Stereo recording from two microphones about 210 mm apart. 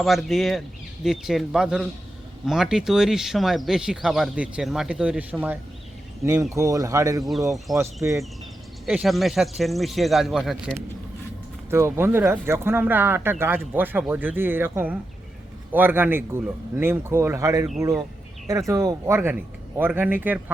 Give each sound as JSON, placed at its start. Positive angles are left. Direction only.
{"t": 0.0, "sound": "speech", "side_deg": 0}
{"t": 11.7, "sound": "speech", "side_deg": -10}